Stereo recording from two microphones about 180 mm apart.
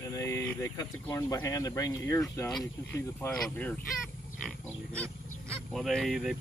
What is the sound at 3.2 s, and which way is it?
Speech, 5° left (ahead or behind).